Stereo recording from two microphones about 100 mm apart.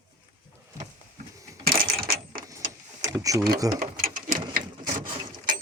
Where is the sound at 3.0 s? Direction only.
35° right (ahead or behind).